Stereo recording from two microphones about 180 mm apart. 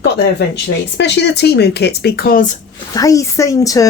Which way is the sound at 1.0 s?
70° left (ahead or behind).